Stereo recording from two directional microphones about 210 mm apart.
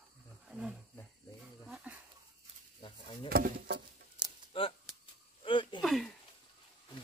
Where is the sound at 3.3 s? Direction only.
45° right (ahead or behind).